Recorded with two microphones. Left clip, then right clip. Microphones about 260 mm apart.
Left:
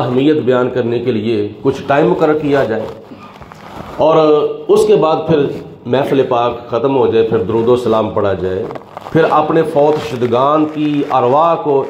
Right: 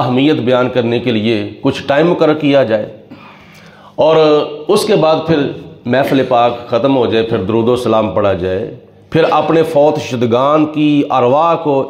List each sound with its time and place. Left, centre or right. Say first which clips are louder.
0.0 s a man's voice: even; right
4.0 s a man's voice: right 1 dB; right